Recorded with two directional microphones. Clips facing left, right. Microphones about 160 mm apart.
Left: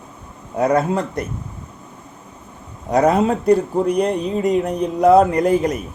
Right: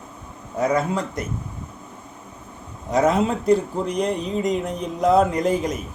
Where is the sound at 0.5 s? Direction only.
60° left (ahead or behind).